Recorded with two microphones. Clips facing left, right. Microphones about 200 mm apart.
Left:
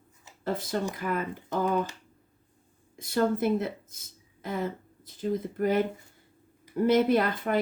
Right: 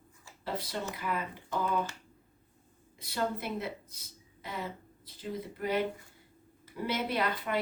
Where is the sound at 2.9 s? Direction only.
50° left (ahead or behind).